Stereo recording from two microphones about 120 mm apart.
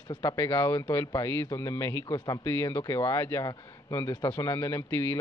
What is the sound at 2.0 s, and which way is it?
A man's voice, 35° left (ahead or behind).